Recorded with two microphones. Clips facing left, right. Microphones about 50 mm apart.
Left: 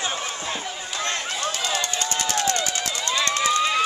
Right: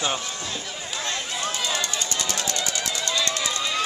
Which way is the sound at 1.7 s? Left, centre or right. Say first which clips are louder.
Left 2 dB; left.